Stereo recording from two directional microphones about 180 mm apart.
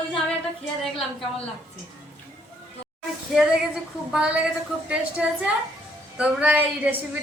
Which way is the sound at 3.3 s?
5° right (ahead or behind).